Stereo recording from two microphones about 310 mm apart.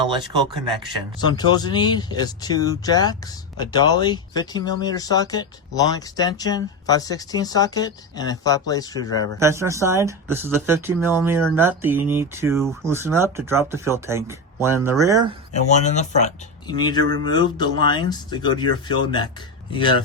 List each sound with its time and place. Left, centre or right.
1.2 s speech: centre
9.4 s speech: centre
15.8 s speech: left